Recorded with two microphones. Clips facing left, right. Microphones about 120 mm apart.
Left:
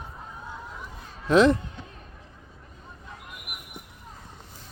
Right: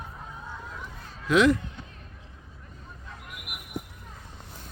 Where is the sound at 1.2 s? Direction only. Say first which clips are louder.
Left 2 dB; 30° left (ahead or behind).